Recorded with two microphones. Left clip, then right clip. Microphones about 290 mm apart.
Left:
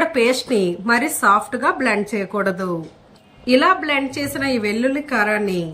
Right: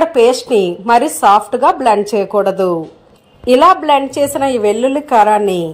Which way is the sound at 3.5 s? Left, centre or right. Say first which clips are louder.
Right 7 dB; right.